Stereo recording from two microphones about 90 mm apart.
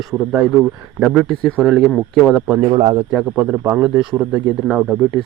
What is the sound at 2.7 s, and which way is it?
Speech, 90° right.